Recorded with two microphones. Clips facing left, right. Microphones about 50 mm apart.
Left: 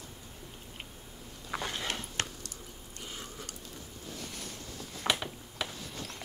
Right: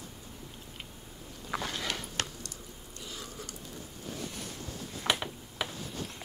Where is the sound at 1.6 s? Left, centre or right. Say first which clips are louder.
Even; left.